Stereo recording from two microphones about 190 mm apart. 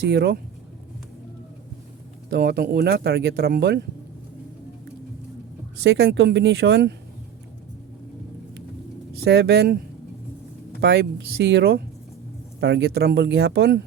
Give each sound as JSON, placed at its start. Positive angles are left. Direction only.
{"t": 0.1, "sound": "speech", "side_deg": -60}
{"t": 2.3, "sound": "speech", "side_deg": -55}
{"t": 5.8, "sound": "speech", "side_deg": -65}
{"t": 9.2, "sound": "speech", "side_deg": -60}
{"t": 10.8, "sound": "speech", "side_deg": -60}